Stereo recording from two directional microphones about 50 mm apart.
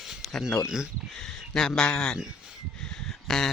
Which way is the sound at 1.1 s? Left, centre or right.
Centre.